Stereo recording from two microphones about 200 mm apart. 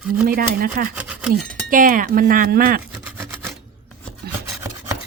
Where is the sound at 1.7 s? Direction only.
45° right (ahead or behind).